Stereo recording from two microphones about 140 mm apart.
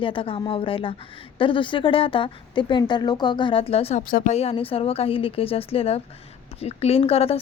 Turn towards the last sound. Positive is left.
turn(degrees=45)  # may be behind; listen again after turning